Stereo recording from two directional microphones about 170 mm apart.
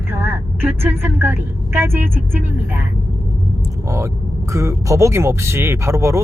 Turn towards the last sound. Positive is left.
turn(degrees=-15)  # may be behind; listen again after turning